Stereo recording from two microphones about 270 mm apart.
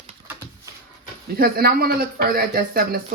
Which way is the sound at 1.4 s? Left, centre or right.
Right.